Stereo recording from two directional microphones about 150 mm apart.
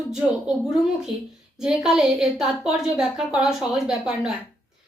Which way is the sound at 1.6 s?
5° right (ahead or behind).